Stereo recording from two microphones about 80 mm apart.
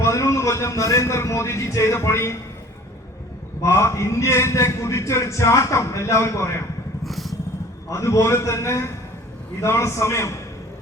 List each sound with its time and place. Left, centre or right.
0.0 s a man's voice: left
3.6 s a man's voice: left
7.0 s vehicle: centre
7.9 s a man's voice: left